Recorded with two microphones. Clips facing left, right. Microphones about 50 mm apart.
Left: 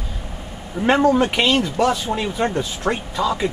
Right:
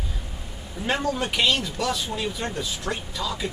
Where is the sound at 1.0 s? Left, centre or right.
Left.